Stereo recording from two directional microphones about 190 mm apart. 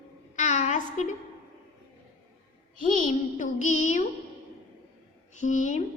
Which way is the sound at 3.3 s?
40° left (ahead or behind).